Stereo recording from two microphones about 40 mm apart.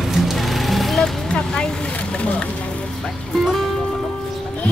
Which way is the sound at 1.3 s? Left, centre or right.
Centre.